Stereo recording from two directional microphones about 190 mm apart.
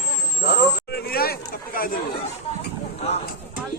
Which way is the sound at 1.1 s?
50° left (ahead or behind).